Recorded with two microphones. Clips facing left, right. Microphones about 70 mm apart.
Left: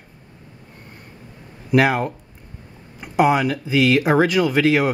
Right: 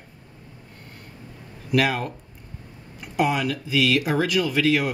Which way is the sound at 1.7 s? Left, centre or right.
Left.